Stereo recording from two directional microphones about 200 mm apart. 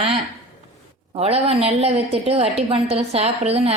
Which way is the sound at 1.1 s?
30° right (ahead or behind).